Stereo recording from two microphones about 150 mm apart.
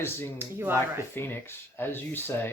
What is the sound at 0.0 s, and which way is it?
Speech, 15° left (ahead or behind).